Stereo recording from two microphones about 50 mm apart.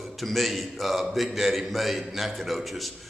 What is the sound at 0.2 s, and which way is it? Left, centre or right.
A man's voice, centre.